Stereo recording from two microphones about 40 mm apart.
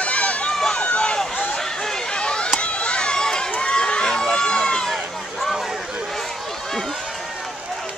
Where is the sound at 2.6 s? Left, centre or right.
Left.